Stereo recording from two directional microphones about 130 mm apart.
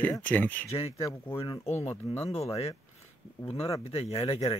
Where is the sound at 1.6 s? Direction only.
20° left (ahead or behind).